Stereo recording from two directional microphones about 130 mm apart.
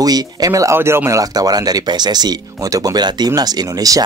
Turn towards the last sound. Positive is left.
turn(degrees=-25)  # may be behind; listen again after turning